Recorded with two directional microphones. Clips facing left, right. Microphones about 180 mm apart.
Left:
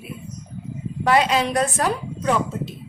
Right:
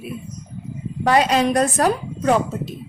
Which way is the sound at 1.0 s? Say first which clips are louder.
Right 2 dB; 45° right (ahead or behind).